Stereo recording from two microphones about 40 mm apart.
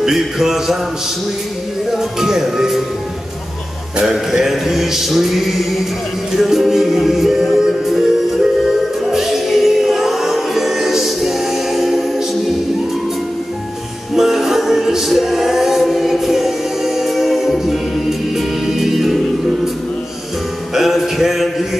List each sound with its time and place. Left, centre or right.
0.0 s male singing: centre
1.9 s male singing: centre
4.0 s male singing: centre
6.3 s music: centre
14.1 s music: centre
20.7 s a sound: centre